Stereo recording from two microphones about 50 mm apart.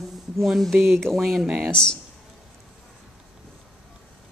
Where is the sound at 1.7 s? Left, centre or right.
Centre.